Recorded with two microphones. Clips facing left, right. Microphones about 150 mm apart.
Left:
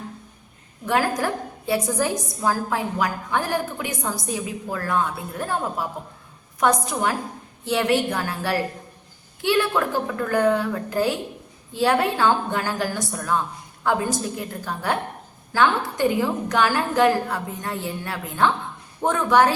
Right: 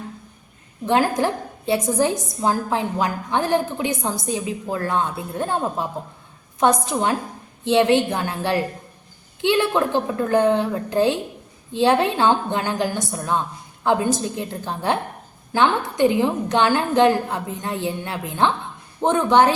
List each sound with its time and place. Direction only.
0.9 s a woman's voice: 25° right (ahead or behind)